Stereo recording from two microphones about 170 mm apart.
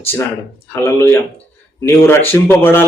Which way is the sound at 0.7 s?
15° left (ahead or behind).